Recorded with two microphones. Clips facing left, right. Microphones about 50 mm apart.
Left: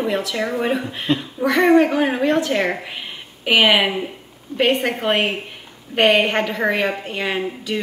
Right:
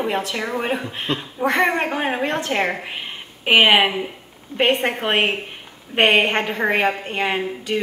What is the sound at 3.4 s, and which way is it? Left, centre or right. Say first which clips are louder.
A woman's voice: right 1 dB; centre.